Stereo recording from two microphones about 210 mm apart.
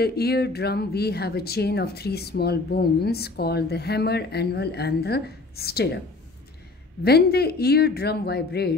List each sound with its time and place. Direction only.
0.0 s speech: 50° left (ahead or behind)
7.0 s speech: 50° left (ahead or behind)